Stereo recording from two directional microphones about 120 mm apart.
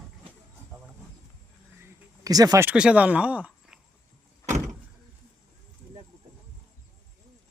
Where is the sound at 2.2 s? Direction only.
30° right (ahead or behind).